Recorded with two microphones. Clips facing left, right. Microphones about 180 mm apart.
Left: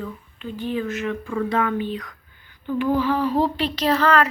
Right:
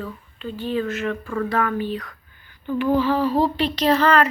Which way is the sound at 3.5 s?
10° left (ahead or behind).